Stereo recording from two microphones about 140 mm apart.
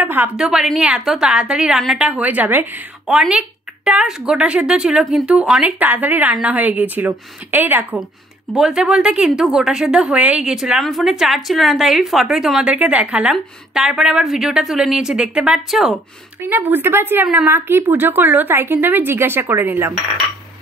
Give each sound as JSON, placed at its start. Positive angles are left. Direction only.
{"t": 0.0, "sound": "a woman's voice", "side_deg": -15}
{"t": 16.3, "sound": "a woman's voice", "side_deg": -15}